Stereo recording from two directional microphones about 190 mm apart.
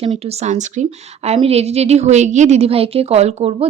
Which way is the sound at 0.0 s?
35° right (ahead or behind).